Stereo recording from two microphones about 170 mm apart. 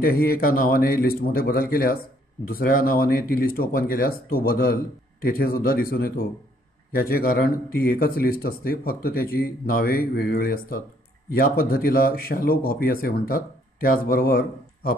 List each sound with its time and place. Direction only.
0.0 s speech: 65° left (ahead or behind)